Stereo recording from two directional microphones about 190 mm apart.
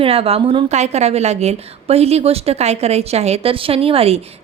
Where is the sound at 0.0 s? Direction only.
30° right (ahead or behind).